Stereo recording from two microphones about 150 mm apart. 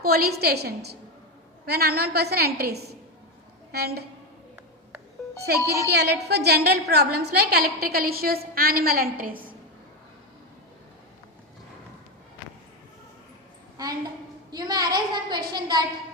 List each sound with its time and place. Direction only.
0.0 s a woman's voice: 90° right
5.5 s a woman's voice: 20° right (ahead or behind)
5.9 s a woman's voice: 90° right; by 9.5 s 70° right (ahead or behind)
14.5 s a woman's voice: 25° right (ahead or behind)